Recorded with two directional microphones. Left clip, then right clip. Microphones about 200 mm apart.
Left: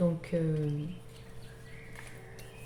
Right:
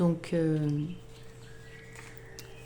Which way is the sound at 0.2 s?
60° right (ahead or behind).